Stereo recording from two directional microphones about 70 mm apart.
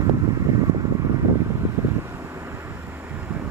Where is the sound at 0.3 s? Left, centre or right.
Right.